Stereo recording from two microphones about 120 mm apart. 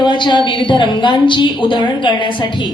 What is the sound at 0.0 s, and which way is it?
A woman's voice, 40° left (ahead or behind).